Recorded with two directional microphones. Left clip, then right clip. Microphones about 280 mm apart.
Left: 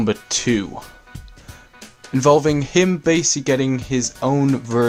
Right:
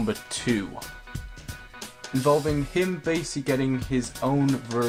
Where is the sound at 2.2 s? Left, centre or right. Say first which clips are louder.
Left 8 dB; left.